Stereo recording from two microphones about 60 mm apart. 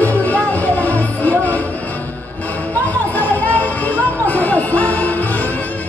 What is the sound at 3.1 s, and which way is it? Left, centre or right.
Music, left.